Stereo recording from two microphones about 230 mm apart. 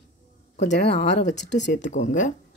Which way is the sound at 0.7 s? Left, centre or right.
Left.